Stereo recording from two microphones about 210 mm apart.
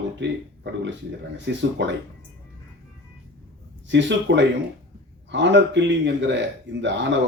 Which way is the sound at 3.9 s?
60° right (ahead or behind).